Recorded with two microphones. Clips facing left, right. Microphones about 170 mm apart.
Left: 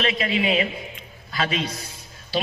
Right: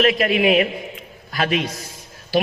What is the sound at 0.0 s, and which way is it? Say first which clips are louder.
A man's voice: right 6 dB; 55° right (ahead or behind).